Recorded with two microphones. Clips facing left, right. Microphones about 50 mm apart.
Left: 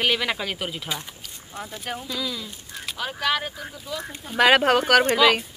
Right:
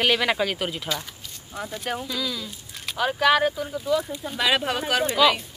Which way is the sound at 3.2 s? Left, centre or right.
Centre.